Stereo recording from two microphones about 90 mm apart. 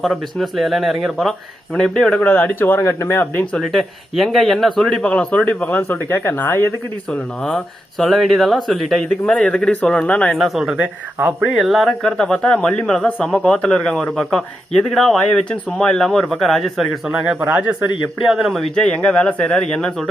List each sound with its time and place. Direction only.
0.0 s speech: centre (ahead or behind)
2.2 s speech: 20° left (ahead or behind)
3.6 s speech: centre (ahead or behind); by 6.7 s 25° left (ahead or behind)
7.1 s speech: 5° left (ahead or behind)
9.2 s speech: 10° left (ahead or behind)
10.3 s speech: centre (ahead or behind)
17.4 s speech: 15° right (ahead or behind)
18.3 s speech: centre (ahead or behind)
18.9 s speech: 10° left (ahead or behind)